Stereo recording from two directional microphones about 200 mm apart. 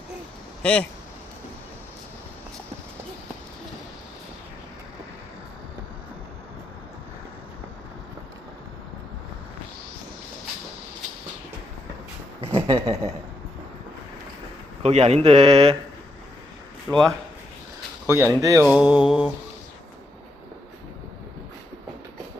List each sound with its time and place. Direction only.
0.6 s speech: 5° left (ahead or behind)
12.5 s a sound: 20° right (ahead or behind)
14.8 s speech: 30° right (ahead or behind)
16.9 s speech: 20° right (ahead or behind)
18.6 s music: 5° right (ahead or behind)